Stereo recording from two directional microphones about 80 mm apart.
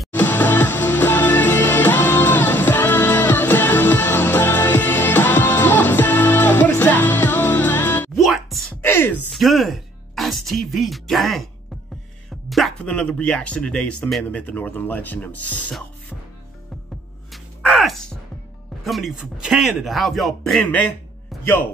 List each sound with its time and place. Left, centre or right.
0.1 s music: left
8.2 s music: centre
8.8 s a sound: left
9.3 s music: centre
12.4 s music: centre
12.8 s speech: centre
14.3 s speech: centre
17.3 s gasp: centre
18.9 s speech: centre